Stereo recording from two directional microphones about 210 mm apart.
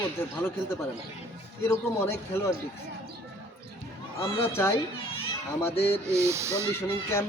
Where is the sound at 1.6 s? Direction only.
10° left (ahead or behind).